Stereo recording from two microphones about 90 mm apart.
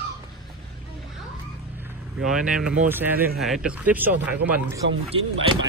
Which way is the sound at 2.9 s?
20° right (ahead or behind).